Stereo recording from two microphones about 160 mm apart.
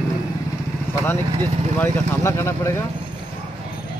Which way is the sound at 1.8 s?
15° left (ahead or behind).